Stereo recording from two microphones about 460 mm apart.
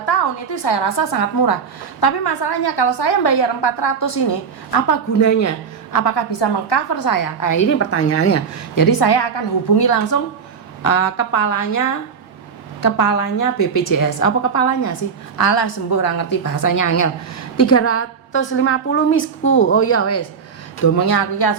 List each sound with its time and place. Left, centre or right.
0.1 s a woman's voice: left
5.2 s a woman's voice: left
8.7 s a woman's voice: left
15.4 s a woman's voice: left
20.8 s a woman's voice: left